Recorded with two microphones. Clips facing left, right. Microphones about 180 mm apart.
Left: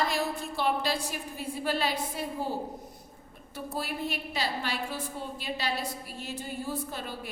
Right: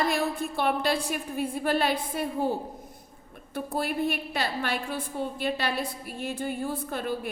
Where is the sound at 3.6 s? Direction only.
55° right (ahead or behind).